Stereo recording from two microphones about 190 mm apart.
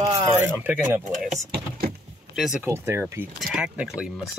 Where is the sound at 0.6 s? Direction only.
10° right (ahead or behind).